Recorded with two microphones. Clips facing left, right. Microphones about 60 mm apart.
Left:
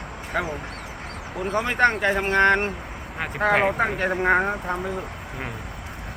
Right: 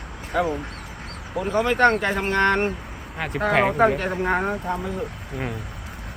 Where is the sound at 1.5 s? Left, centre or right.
Centre.